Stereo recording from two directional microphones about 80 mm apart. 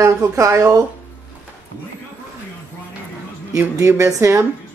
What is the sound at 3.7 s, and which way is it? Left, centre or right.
Speech, right.